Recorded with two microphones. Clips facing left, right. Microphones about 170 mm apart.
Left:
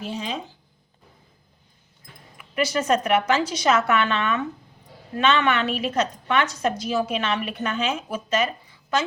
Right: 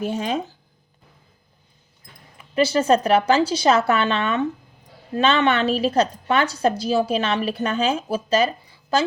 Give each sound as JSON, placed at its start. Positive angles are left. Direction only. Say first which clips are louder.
{"t": 0.0, "sound": "speech", "louder": "right 6 dB", "side_deg": -50}
{"t": 2.4, "sound": "a woman's voice", "louder": "right 5 dB", "side_deg": -30}